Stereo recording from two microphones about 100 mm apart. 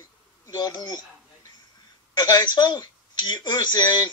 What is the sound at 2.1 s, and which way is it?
Speech, 45° left (ahead or behind).